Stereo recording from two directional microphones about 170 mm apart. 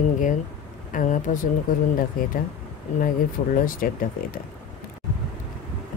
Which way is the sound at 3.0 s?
55° left (ahead or behind).